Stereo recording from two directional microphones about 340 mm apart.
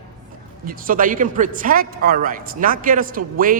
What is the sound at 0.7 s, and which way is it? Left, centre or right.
A woman's voice, right.